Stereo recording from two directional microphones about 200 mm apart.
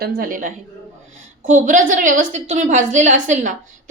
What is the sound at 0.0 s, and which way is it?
A woman's voice, 45° right (ahead or behind).